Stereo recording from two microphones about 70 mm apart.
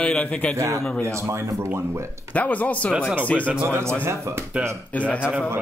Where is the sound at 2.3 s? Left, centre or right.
Left.